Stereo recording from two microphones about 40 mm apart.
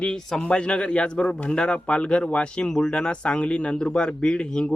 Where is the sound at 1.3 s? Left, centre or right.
Left.